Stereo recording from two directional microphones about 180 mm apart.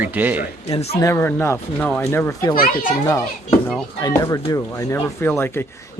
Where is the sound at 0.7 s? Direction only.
35° left (ahead or behind).